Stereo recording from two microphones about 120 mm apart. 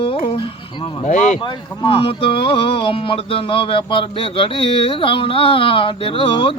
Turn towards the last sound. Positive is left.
turn(degrees=45)  # may be behind; listen again after turning